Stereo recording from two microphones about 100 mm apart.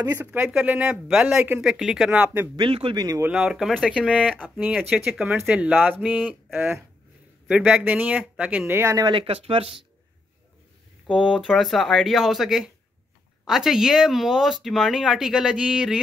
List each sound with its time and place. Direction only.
0.0 s speech: 20° right (ahead or behind)
1.6 s speech: 5° right (ahead or behind)
2.5 s a man's voice: 60° right (ahead or behind)
3.3 s speech: 5° right (ahead or behind)
4.8 s speech: centre (ahead or behind); by 6.7 s 20° right (ahead or behind)
7.4 s speech: 5° right (ahead or behind)
9.1 s speech: 65° right (ahead or behind)
11.1 s speech: 10° right (ahead or behind)